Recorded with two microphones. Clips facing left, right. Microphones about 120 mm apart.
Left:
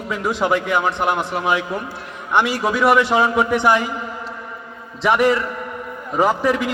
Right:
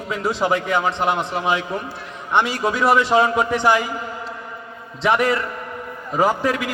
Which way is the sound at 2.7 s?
65° left (ahead or behind).